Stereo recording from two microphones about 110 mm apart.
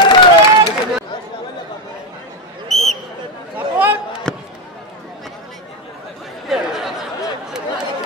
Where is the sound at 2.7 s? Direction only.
Centre (ahead or behind).